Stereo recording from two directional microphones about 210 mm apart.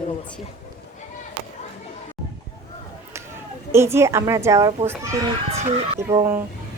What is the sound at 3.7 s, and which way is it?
A woman's voice, 10° right (ahead or behind).